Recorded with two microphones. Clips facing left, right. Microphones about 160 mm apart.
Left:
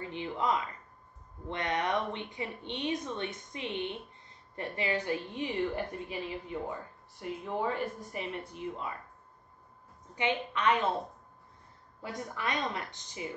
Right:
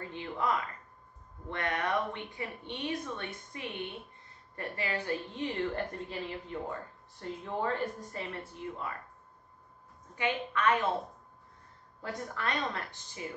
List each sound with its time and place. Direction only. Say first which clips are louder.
0.1 s a woman's voice: left 1 dB; 20° left (ahead or behind)
10.1 s speech: left 1 dB; 20° left (ahead or behind)
12.0 s a woman's voice: even; 15° left (ahead or behind)